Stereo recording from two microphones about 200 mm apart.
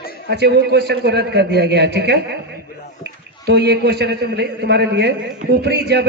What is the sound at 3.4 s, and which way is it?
A man's voice, 55° right (ahead or behind).